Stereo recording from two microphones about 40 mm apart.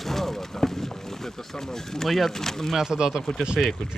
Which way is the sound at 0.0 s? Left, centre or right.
Centre.